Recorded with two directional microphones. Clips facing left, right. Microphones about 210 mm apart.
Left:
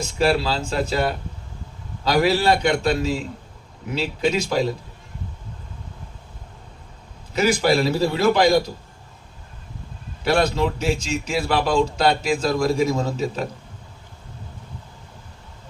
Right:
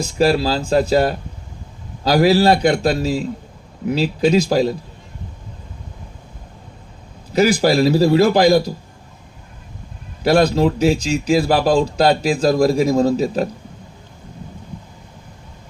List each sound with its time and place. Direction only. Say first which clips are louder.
0.0 s speech: right 4 dB; 35° right (ahead or behind)
7.3 s speech: right 4 dB; 35° right (ahead or behind)
10.2 s speech: right 6 dB; 35° right (ahead or behind)